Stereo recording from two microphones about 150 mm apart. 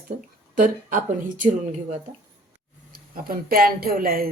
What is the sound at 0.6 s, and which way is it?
Speech, 60° right (ahead or behind).